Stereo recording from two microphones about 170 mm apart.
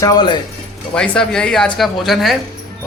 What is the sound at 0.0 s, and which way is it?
Speech, 25° left (ahead or behind).